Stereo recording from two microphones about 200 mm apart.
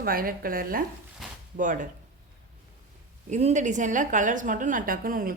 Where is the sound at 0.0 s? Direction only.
45° right (ahead or behind).